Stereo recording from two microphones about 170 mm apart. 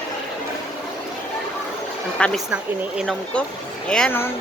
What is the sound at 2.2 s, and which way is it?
Speech, 5° left (ahead or behind).